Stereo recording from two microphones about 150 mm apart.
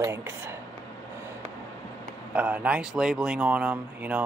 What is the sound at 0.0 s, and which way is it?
Speech, 20° right (ahead or behind).